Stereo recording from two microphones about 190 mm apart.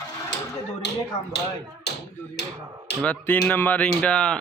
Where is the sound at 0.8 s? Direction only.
65° left (ahead or behind).